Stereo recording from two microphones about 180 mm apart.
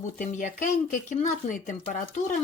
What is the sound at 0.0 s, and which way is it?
Speech, 45° left (ahead or behind).